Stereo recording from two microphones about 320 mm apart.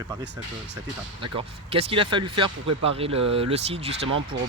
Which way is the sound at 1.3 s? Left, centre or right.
Centre.